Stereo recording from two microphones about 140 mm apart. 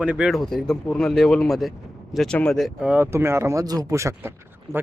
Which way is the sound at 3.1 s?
20° right (ahead or behind).